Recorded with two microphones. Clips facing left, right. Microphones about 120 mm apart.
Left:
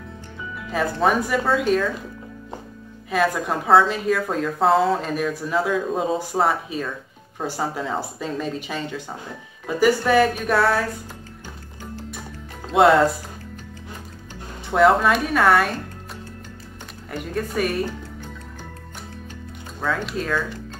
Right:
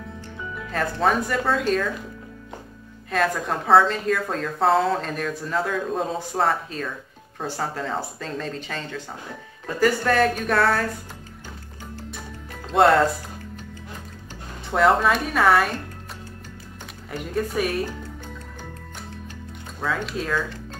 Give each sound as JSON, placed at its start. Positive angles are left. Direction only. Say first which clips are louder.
{"t": 0.7, "sound": "a woman's voice", "louder": "left 2 dB", "side_deg": 10}
{"t": 3.1, "sound": "a woman's voice", "louder": "left 2 dB", "side_deg": 5}
{"t": 12.7, "sound": "a woman's voice", "louder": "left 2 dB", "side_deg": 0}
{"t": 14.7, "sound": "a woman's voice", "louder": "left 2 dB", "side_deg": 0}
{"t": 17.1, "sound": "a woman's voice", "louder": "even", "side_deg": 0}
{"t": 19.8, "sound": "a woman's voice", "louder": "left 2 dB", "side_deg": 0}